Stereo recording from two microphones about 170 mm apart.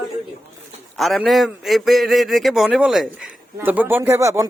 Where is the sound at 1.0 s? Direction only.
Centre (ahead or behind).